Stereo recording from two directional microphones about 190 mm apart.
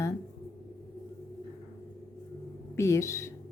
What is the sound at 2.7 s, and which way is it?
Speech, 15° left (ahead or behind).